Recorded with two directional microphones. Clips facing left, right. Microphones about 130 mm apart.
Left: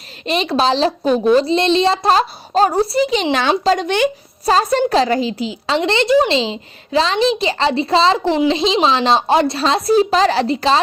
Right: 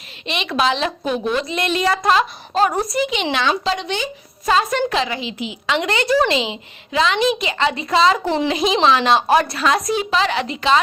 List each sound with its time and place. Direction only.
0.3 s a woman's voice: 35° left (ahead or behind)